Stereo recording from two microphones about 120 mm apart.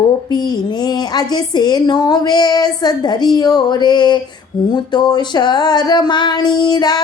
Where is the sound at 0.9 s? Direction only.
35° left (ahead or behind).